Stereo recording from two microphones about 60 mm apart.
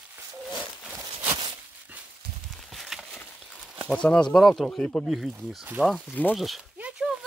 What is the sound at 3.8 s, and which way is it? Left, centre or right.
Speech, centre.